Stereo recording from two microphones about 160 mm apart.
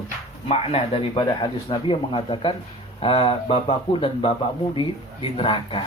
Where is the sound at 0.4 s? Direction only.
40° left (ahead or behind).